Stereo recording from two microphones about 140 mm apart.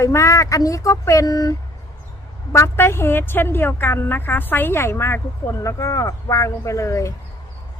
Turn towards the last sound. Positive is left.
turn(degrees=20)  # may be behind; listen again after turning